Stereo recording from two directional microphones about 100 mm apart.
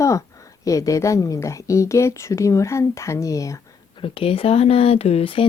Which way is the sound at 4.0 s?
65° left (ahead or behind).